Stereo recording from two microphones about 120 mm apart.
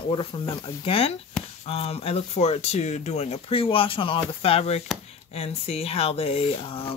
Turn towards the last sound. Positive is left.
turn(degrees=50)  # may be behind; listen again after turning